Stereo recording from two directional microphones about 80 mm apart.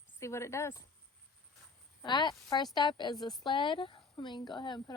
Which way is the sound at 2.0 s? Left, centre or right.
Left.